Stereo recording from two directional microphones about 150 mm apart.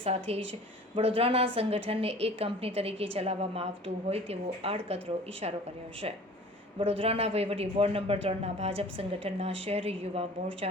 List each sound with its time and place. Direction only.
0.0 s a woman's voice: 40° right (ahead or behind)
6.7 s a woman's voice: 40° right (ahead or behind)